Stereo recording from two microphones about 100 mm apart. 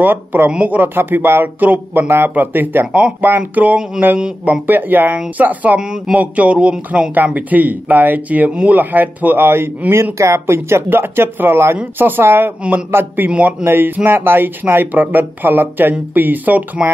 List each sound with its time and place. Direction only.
0.0 s speech: 20° right (ahead or behind)